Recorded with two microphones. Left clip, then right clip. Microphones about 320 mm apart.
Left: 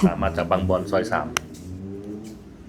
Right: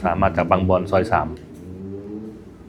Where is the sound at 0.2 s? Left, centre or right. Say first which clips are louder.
Right 5 dB; right.